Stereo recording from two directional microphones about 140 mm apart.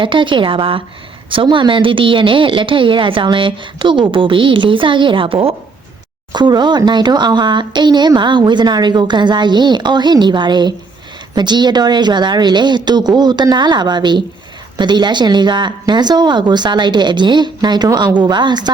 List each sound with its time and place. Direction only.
0.0 s speech: 35° right (ahead or behind)